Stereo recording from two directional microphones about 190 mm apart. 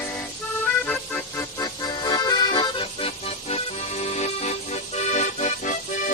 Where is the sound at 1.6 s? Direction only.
20° left (ahead or behind).